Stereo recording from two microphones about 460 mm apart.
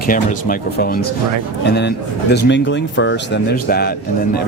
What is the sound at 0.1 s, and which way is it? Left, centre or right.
Speech, centre.